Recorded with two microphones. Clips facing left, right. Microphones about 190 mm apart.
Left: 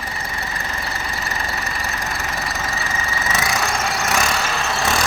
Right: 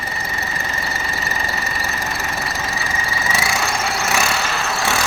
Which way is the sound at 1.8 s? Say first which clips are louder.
Right 1 dB; centre (ahead or behind).